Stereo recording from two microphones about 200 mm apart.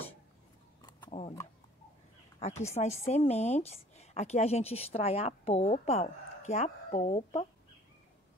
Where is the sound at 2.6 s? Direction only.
35° left (ahead or behind).